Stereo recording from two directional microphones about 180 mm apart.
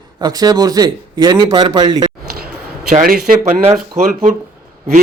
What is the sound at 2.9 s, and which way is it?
Speech, 45° right (ahead or behind).